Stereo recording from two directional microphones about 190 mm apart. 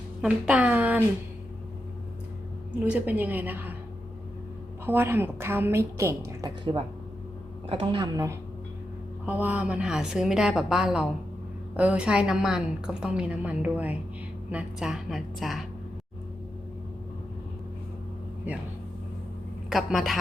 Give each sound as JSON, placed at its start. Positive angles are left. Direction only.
{"t": 0.2, "sound": "a woman's voice", "side_deg": -5}
{"t": 2.8, "sound": "a woman's voice", "side_deg": -10}
{"t": 4.9, "sound": "a woman's voice", "side_deg": -10}
{"t": 19.7, "sound": "a woman's voice", "side_deg": 0}